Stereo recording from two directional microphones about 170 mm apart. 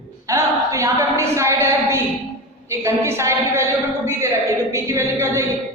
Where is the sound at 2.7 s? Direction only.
15° right (ahead or behind).